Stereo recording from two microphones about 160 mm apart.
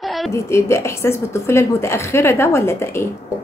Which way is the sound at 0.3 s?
15° left (ahead or behind).